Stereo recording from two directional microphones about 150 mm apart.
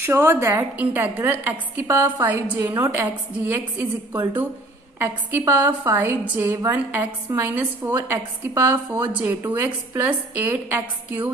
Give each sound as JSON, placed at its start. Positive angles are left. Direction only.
{"t": 0.0, "sound": "a woman's voice", "side_deg": -15}
{"t": 2.7, "sound": "a woman's voice", "side_deg": -20}